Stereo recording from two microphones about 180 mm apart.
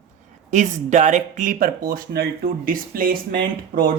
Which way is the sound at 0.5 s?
40° right (ahead or behind).